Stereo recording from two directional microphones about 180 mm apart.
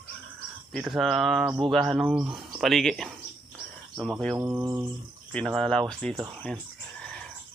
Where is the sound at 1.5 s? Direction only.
25° right (ahead or behind).